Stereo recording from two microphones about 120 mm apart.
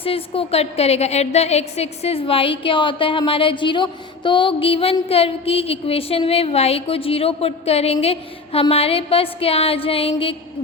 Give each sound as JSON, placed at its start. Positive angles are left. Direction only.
{"t": 0.0, "sound": "a woman's voice", "side_deg": 55}